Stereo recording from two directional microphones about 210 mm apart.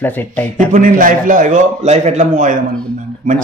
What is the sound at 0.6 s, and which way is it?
Speech, 40° right (ahead or behind).